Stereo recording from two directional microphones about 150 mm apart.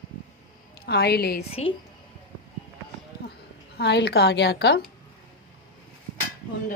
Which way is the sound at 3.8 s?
90° left.